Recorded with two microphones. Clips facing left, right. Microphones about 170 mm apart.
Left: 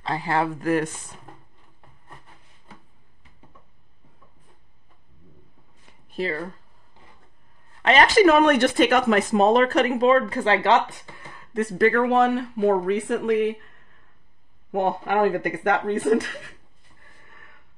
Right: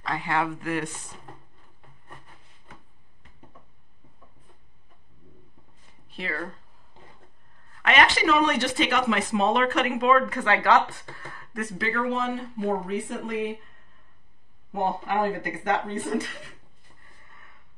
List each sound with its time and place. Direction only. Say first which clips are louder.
0.0 s speech: left 3 dB; 35° left (ahead or behind)
6.0 s a sound: left 9 dB; 40° left (ahead or behind)
7.7 s speech: left 5 dB; 30° left (ahead or behind)
11.8 s speech: left 9 dB; 60° left (ahead or behind)
14.7 s speech: left 4 dB; 65° left (ahead or behind)